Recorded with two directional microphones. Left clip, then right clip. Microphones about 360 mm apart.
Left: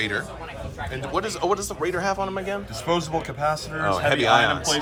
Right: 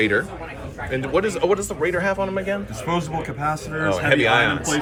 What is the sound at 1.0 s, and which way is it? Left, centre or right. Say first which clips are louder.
Speech: right 4 dB; centre.